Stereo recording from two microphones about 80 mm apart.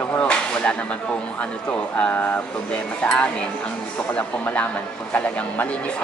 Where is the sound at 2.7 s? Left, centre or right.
Centre.